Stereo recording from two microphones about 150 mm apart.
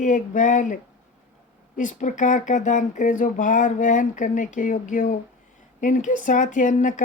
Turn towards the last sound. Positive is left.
turn(degrees=55)  # may be behind; listen again after turning